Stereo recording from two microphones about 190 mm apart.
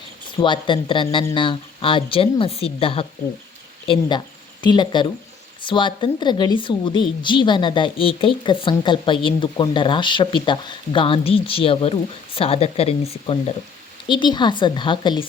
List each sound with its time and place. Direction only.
0.3 s a woman's voice: 25° left (ahead or behind)
4.6 s a woman's voice: 25° left (ahead or behind)